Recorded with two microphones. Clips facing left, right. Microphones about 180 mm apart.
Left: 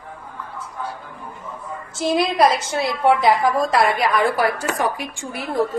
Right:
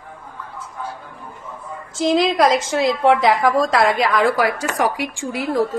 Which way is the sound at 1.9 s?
90° right.